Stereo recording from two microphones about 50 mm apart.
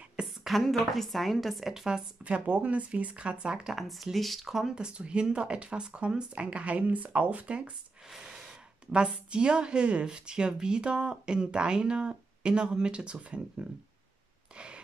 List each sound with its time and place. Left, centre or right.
0.1 s a sound: centre
0.6 s a woman's voice: centre
2.2 s speech: right
3.7 s a woman's voice: centre
4.6 s speech: centre
8.1 s speech: centre